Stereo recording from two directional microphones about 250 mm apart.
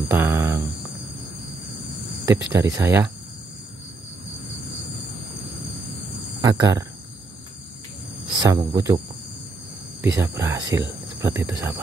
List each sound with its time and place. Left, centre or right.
0.1 s a sound: centre
2.2 s speech: centre
6.4 s speech: centre
8.4 s speech: centre
10.0 s speech: centre